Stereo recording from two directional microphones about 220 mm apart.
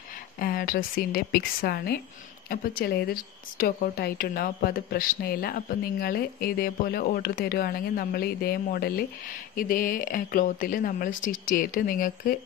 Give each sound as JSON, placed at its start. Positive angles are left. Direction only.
{"t": 0.4, "sound": "a woman's voice", "side_deg": 40}